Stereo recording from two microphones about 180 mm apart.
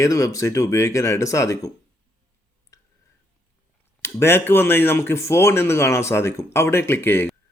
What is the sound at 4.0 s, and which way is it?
Speech, 15° left (ahead or behind).